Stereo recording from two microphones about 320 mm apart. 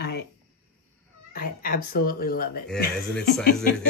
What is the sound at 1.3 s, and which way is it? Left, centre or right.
Speech, left.